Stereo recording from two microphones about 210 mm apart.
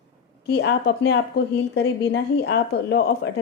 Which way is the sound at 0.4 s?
55° left (ahead or behind).